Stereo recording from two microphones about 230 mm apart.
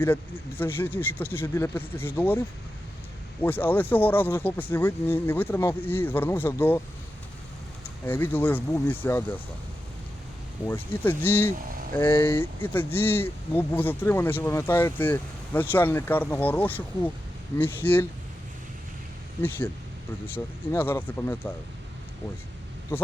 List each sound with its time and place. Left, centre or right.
0.0 s speech: centre
3.4 s speech: centre
8.0 s speech: centre
10.7 s speech: centre
19.4 s speech: centre